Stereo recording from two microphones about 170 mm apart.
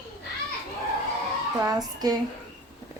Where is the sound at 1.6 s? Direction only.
20° right (ahead or behind).